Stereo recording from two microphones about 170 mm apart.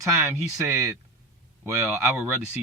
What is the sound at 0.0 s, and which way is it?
Speech, 15° right (ahead or behind).